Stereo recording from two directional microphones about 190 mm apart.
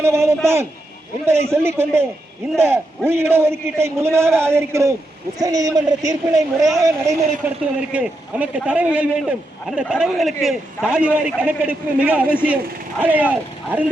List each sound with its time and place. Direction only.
0.0 s a man's voice: 15° right (ahead or behind)
7.6 s a man's voice: 5° right (ahead or behind)